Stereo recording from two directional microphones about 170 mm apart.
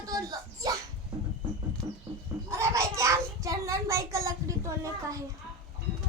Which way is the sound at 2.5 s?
15° right (ahead or behind).